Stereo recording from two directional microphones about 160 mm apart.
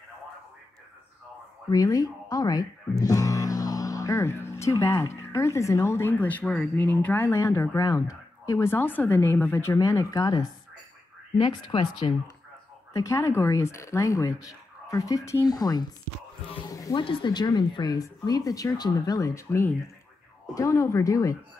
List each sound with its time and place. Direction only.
1.7 s speech: 20° left (ahead or behind)
16.7 s a sound: 20° left (ahead or behind)
17.0 s speech: 30° left (ahead or behind)